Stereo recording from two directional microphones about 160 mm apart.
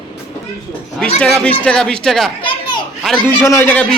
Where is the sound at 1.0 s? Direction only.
5° left (ahead or behind).